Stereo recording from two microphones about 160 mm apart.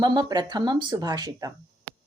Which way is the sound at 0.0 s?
25° right (ahead or behind).